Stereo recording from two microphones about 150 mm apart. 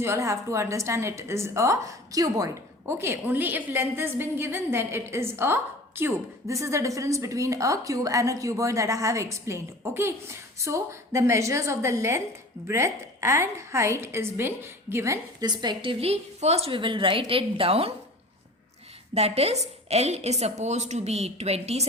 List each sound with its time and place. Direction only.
0.0 s a woman's voice: 20° right (ahead or behind); by 17.9 s 40° right (ahead or behind)
19.1 s a woman's voice: 45° right (ahead or behind)